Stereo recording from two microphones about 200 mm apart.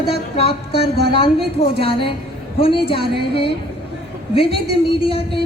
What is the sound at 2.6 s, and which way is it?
Speech, 25° left (ahead or behind).